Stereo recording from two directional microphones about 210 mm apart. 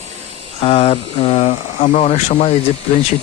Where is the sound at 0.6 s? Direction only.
30° left (ahead or behind).